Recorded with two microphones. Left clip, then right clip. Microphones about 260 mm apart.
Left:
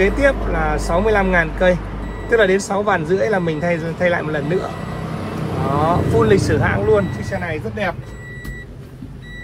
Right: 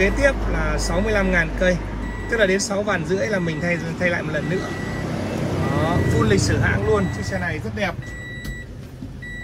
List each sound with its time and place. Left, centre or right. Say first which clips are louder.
0.0 s speech: left 3 dB; centre
5.9 s speech: left 6 dB; centre
7.1 s speech: left 2 dB; centre